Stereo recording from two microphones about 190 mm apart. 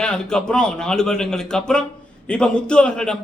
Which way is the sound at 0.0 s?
5° left (ahead or behind).